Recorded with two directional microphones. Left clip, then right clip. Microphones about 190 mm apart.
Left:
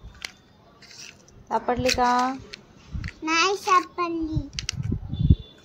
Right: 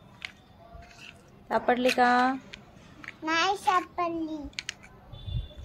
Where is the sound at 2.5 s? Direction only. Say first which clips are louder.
Left 4 dB; 20° left (ahead or behind).